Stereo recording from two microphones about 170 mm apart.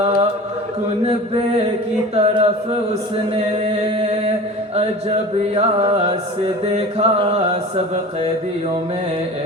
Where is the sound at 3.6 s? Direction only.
40° right (ahead or behind).